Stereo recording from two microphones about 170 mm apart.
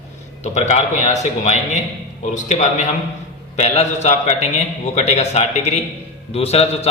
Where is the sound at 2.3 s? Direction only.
45° left (ahead or behind).